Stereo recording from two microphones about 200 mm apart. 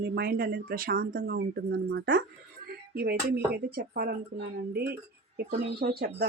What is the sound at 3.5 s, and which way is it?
Speech, 50° right (ahead or behind).